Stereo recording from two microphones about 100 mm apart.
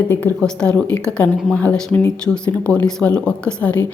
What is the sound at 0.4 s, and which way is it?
A woman's voice, 10° left (ahead or behind).